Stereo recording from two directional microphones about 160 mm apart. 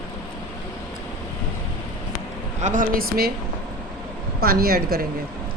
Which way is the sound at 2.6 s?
50° right (ahead or behind).